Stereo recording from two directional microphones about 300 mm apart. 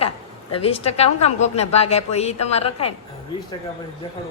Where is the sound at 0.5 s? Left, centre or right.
Centre.